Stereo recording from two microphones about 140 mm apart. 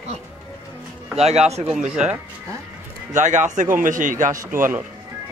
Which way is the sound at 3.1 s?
60° right (ahead or behind).